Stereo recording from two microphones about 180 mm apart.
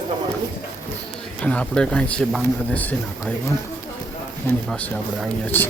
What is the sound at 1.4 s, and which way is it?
Speech, 5° left (ahead or behind).